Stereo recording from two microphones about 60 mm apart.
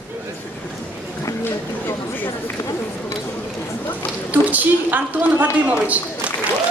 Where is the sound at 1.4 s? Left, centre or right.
Left.